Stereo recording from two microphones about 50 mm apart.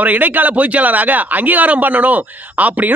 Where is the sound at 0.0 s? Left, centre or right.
Right.